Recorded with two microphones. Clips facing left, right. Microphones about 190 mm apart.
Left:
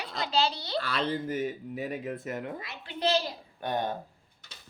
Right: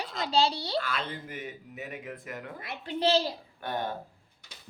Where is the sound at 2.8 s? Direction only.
30° right (ahead or behind).